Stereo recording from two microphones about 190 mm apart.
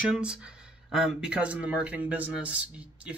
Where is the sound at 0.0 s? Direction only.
5° right (ahead or behind).